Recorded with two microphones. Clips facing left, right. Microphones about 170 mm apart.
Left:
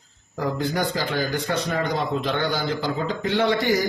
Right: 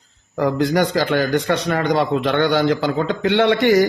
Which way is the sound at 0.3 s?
75° right (ahead or behind).